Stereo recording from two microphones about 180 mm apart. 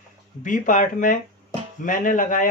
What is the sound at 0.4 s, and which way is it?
Speech, 45° left (ahead or behind).